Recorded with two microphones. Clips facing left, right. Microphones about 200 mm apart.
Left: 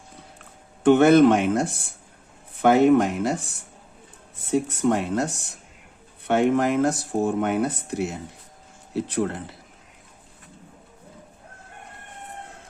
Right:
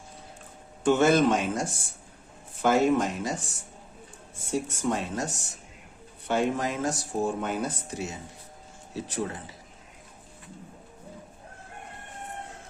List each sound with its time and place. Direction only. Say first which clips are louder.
0.9 s speech: left 7 dB; 60° left (ahead or behind)
4.5 s speech: left 7 dB; 60° left (ahead or behind)